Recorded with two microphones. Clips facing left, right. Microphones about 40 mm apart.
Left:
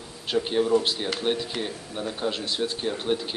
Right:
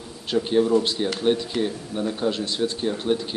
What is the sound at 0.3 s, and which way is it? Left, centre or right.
Speech, centre.